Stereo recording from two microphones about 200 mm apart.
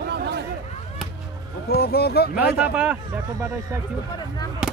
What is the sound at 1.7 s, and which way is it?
Speech, 50° left (ahead or behind).